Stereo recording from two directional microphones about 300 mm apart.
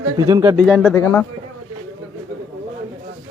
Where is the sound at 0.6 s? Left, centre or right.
Centre.